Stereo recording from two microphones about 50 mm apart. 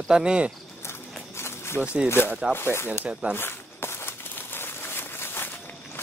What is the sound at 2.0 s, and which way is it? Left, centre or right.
Speech, left.